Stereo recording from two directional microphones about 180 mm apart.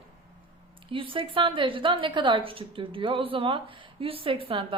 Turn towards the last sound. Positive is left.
turn(degrees=-30)  # may be behind; listen again after turning